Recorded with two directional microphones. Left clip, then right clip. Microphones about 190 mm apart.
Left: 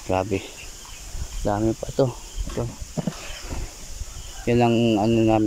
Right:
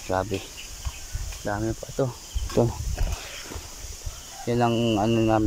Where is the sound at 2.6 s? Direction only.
15° right (ahead or behind).